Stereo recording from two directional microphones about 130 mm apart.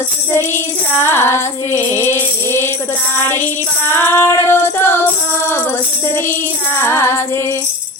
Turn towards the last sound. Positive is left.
turn(degrees=20)  # may be behind; listen again after turning